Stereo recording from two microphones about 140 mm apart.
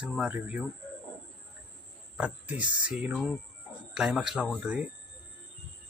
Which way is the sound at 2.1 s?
10° right (ahead or behind).